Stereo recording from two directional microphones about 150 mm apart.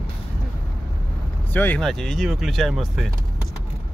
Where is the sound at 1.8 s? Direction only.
Centre (ahead or behind).